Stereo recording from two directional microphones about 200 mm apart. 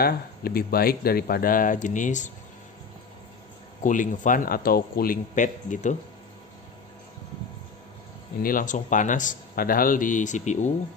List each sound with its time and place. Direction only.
0.0 s speech: 50° left (ahead or behind)
3.8 s speech: 40° left (ahead or behind)
8.4 s speech: 45° left (ahead or behind)